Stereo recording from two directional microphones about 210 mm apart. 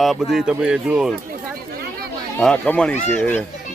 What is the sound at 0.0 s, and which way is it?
Speech, centre (ahead or behind).